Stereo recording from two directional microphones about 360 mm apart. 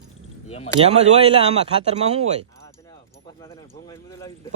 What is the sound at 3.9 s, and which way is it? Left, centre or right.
Speech, centre.